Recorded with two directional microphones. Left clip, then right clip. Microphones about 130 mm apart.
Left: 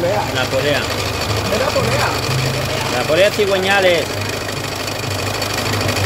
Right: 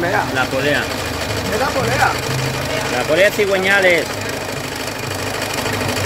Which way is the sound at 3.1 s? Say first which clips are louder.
Even; centre (ahead or behind).